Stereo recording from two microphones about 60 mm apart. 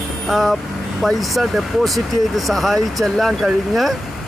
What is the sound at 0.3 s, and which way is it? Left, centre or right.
Speech, centre.